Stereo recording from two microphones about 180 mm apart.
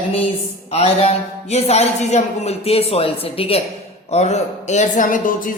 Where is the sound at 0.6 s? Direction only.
35° left (ahead or behind).